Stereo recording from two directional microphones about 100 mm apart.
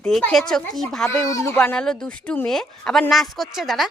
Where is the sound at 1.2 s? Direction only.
35° left (ahead or behind).